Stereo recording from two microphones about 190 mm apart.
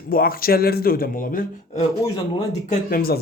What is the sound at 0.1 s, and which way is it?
Speech, 50° left (ahead or behind).